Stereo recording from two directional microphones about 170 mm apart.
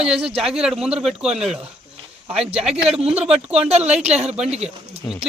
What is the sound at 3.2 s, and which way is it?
Speech, 35° right (ahead or behind).